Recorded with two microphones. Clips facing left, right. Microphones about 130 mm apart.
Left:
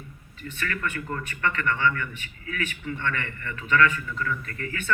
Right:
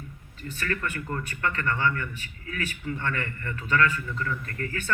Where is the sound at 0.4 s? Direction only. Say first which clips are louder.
Even; 35° right (ahead or behind).